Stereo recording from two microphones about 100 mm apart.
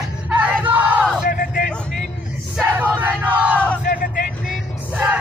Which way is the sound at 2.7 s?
15° right (ahead or behind).